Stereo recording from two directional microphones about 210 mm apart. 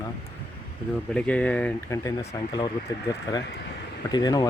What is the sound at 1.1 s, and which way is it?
Speech, 5° left (ahead or behind).